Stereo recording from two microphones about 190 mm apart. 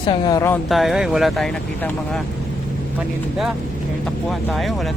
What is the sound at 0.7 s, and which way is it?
Speech, centre (ahead or behind).